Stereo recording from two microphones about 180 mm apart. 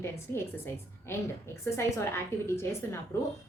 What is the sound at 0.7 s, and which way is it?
A woman's voice, 15° left (ahead or behind).